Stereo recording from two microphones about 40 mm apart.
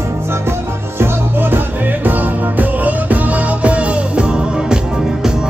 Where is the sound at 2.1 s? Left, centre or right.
Right.